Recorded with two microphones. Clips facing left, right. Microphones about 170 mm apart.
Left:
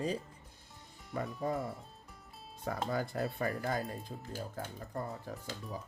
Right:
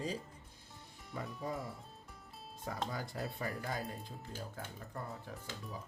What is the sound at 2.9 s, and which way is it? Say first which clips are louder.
Speech: left 7 dB; 60° left (ahead or behind).